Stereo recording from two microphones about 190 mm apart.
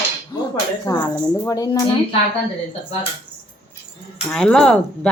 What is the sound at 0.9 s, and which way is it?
Speech, 20° left (ahead or behind).